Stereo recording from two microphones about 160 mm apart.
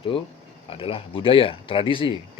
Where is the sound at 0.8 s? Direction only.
35° left (ahead or behind).